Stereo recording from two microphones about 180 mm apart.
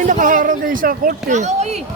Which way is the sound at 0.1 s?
45° right (ahead or behind).